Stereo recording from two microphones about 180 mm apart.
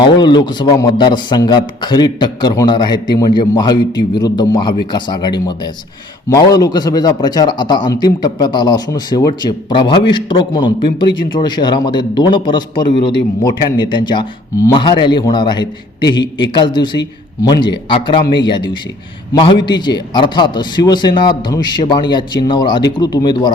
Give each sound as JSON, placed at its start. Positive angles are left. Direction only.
{"t": 0.0, "sound": "speech", "side_deg": 25}
{"t": 18.2, "sound": "a man's voice", "side_deg": 70}
{"t": 19.3, "sound": "speech", "side_deg": 25}